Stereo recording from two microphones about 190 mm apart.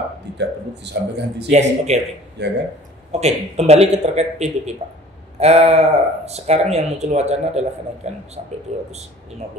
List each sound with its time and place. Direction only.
0.4 s a man's voice: 65° right (ahead or behind)
1.5 s speech: 35° right (ahead or behind)
2.4 s a man's voice: 65° right (ahead or behind)
3.1 s speech: 35° right (ahead or behind)